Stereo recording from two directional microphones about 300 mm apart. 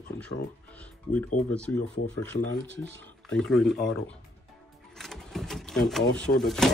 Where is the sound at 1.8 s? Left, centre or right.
Left.